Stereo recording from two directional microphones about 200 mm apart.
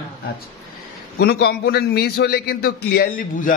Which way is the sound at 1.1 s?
55° left (ahead or behind).